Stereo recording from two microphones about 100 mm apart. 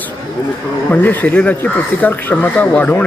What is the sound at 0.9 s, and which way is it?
Speech, 20° left (ahead or behind).